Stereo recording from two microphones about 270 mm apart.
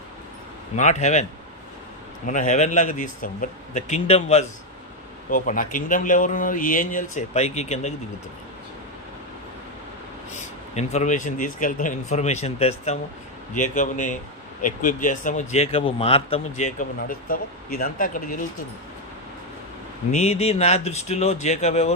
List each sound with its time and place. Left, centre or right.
0.8 s a man's voice: left
2.2 s a man's voice: left
10.8 s a man's voice: left
20.1 s a man's voice: left